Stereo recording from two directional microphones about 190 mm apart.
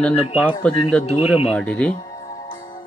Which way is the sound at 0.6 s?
5° left (ahead or behind).